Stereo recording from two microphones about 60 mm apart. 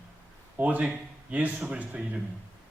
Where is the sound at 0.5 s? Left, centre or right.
Right.